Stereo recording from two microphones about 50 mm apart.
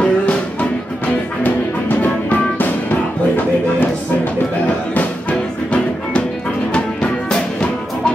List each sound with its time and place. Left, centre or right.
0.0 s music: left
2.2 s music: left
6.7 s music: centre